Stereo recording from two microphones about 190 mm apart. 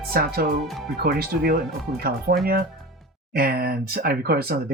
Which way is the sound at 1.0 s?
55° right (ahead or behind).